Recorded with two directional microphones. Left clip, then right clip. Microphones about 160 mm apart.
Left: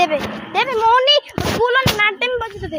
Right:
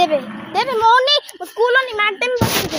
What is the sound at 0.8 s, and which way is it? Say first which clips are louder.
Speech: even; 25° right (ahead or behind).